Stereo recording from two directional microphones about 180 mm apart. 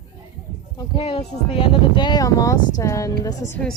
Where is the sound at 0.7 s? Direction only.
30° left (ahead or behind).